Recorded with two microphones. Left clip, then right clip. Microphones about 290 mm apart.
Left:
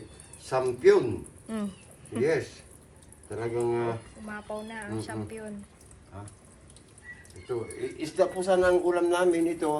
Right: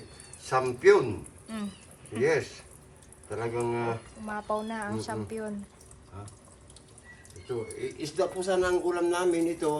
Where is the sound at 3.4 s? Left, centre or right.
Centre.